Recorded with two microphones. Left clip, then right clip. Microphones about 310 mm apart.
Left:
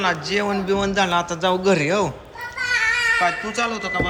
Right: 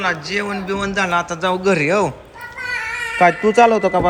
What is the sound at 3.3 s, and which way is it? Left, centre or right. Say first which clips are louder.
Speech: right 11 dB; centre.